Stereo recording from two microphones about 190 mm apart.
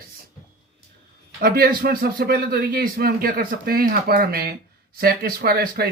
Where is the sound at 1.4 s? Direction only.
50° right (ahead or behind).